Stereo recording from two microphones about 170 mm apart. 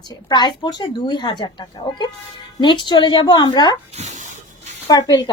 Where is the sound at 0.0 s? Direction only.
25° left (ahead or behind).